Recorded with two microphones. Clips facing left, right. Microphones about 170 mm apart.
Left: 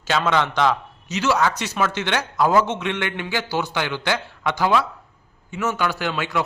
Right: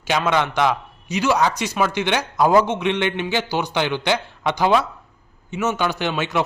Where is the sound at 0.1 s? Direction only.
15° right (ahead or behind).